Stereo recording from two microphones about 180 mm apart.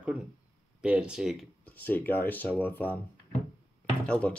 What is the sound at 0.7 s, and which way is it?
Speech, 5° right (ahead or behind).